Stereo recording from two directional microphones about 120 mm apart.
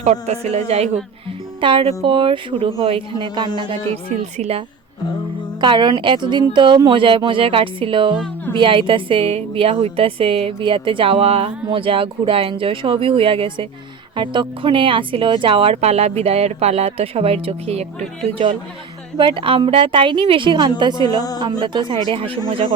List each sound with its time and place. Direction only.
0.0 s speech: 65° right (ahead or behind)
1.6 s a woman's voice: 45° right (ahead or behind)
4.4 s speech: 55° right (ahead or behind)
5.5 s a woman's voice: 40° right (ahead or behind)
19.1 s a woman's voice: 40° right (ahead or behind)